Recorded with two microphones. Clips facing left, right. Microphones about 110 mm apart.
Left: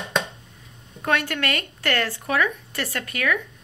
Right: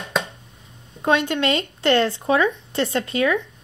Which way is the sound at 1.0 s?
20° right (ahead or behind).